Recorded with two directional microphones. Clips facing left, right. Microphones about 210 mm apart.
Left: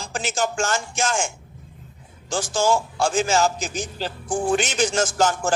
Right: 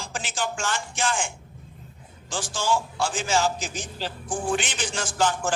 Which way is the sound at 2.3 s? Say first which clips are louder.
Left 5 dB; 45° left (ahead or behind).